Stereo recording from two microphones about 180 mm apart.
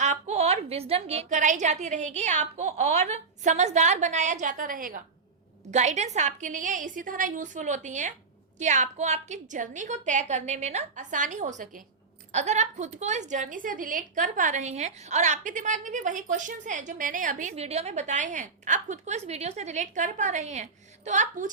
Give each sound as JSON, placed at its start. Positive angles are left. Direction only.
{"t": 0.0, "sound": "a woman's voice", "side_deg": -40}